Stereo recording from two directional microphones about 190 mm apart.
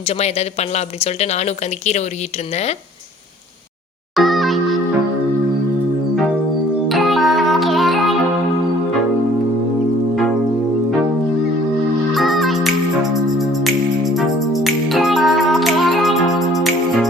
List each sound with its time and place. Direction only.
0.1 s speech: 35° left (ahead or behind)
4.1 s music: centre (ahead or behind)
6.8 s music: centre (ahead or behind)
12.1 s music: centre (ahead or behind)